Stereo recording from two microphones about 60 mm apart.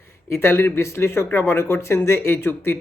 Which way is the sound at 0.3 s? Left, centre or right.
Left.